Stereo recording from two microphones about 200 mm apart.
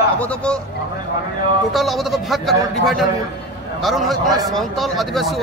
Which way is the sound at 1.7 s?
Centre (ahead or behind).